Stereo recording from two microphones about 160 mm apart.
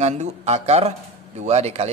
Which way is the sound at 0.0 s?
40° right (ahead or behind).